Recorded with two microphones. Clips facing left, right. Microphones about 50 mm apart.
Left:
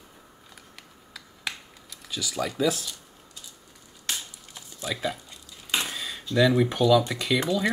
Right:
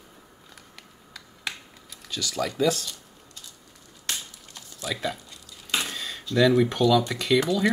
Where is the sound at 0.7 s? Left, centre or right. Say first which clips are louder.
Even; centre.